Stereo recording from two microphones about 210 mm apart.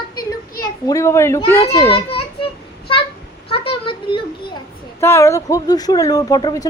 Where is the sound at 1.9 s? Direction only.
25° left (ahead or behind).